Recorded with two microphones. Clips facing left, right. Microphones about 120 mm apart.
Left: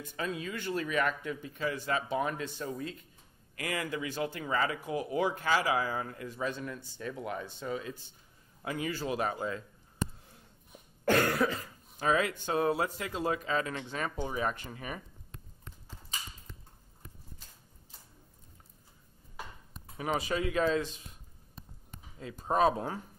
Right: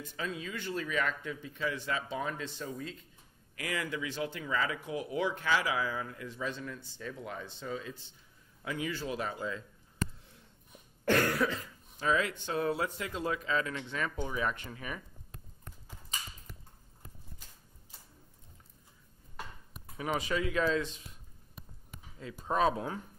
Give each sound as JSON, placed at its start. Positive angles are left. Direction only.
{"t": 0.0, "sound": "speech", "side_deg": 50}
{"t": 6.5, "sound": "speech", "side_deg": 10}
{"t": 7.0, "sound": "speech", "side_deg": 60}
{"t": 7.3, "sound": "speech", "side_deg": 10}
{"t": 8.6, "sound": "speech", "side_deg": 45}
{"t": 11.1, "sound": "speech", "side_deg": 45}
{"t": 20.0, "sound": "speech", "side_deg": 35}
{"t": 20.3, "sound": "speech", "side_deg": 50}
{"t": 22.4, "sound": "speech", "side_deg": 40}